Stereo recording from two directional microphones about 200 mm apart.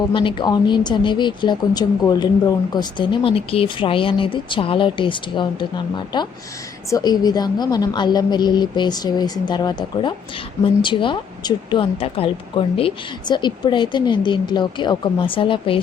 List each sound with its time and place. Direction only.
0.1 s a woman's voice: 25° left (ahead or behind)